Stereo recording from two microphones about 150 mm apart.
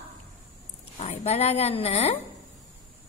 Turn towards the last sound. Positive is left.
turn(degrees=45)  # may be behind; listen again after turning